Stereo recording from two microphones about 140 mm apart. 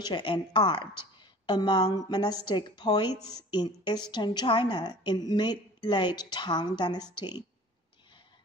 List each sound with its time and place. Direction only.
0.0 s a woman's voice: 35° left (ahead or behind)